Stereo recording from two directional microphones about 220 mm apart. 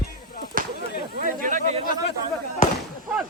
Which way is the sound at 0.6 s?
40° right (ahead or behind).